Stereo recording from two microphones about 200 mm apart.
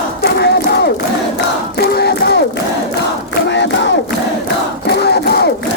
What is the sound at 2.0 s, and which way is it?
Crowd, 55° left (ahead or behind).